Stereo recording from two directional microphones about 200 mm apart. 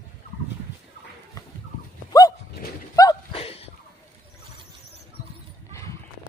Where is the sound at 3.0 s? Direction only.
25° left (ahead or behind).